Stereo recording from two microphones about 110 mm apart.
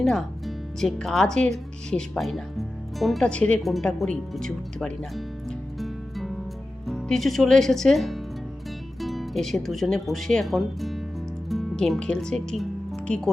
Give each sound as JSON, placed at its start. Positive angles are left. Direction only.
{"t": 0.0, "sound": "speech", "side_deg": 0}
{"t": 11.4, "sound": "music", "side_deg": 0}